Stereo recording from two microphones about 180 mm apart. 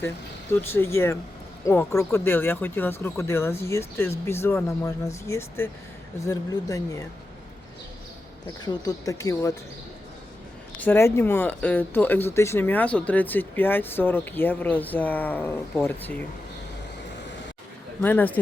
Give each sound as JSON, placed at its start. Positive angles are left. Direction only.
{"t": 0.6, "sound": "speech", "side_deg": 15}
{"t": 8.6, "sound": "speech", "side_deg": 20}
{"t": 10.8, "sound": "speech", "side_deg": 10}
{"t": 18.0, "sound": "speech", "side_deg": 10}